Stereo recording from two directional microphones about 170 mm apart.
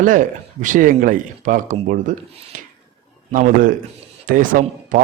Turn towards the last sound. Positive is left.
turn(degrees=-50)  # may be behind; listen again after turning